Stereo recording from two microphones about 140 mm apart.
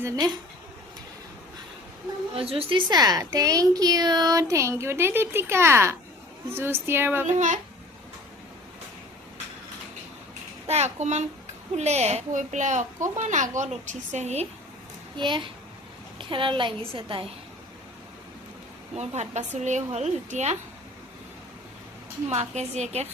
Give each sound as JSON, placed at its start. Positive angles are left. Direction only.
{"t": 2.3, "sound": "a woman's voice", "side_deg": -45}
{"t": 7.3, "sound": "a child's voice", "side_deg": -60}
{"t": 10.7, "sound": "a child's voice", "side_deg": -50}
{"t": 15.1, "sound": "a child's voice", "side_deg": -35}
{"t": 18.9, "sound": "a woman's voice", "side_deg": -55}
{"t": 22.3, "sound": "a woman's voice", "side_deg": -55}